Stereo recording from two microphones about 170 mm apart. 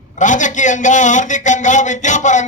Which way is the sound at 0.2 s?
45° left (ahead or behind).